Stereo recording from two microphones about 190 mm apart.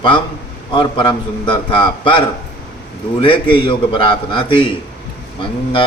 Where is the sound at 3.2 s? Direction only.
25° left (ahead or behind).